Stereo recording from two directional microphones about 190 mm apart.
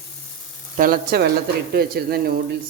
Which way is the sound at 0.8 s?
55° right (ahead or behind).